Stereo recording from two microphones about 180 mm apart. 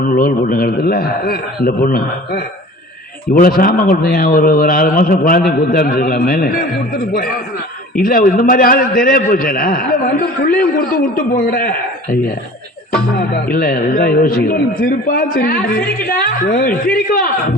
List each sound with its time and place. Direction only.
0.0 s a man's voice: 50° left (ahead or behind)
13.1 s speech: 55° left (ahead or behind)